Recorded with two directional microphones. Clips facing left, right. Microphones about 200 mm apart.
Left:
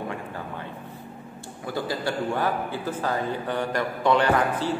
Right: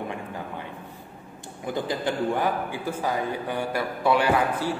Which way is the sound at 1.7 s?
20° right (ahead or behind).